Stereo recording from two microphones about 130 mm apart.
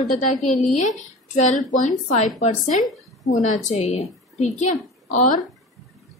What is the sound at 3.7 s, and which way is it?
A woman's voice, 50° left (ahead or behind).